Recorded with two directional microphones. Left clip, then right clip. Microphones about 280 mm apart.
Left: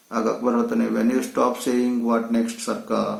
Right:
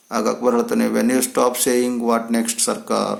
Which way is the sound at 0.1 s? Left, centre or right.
Right.